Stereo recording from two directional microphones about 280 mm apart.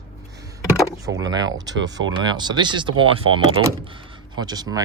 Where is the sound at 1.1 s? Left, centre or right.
Centre.